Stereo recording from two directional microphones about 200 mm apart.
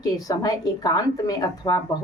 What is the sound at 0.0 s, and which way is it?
A woman's voice, 20° left (ahead or behind).